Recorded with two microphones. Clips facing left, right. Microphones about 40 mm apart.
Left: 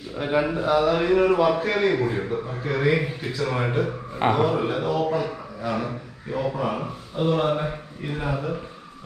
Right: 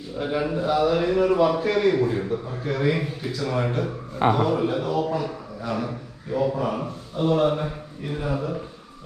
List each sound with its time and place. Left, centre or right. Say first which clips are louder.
0.2 s a man's voice: left 2 dB; left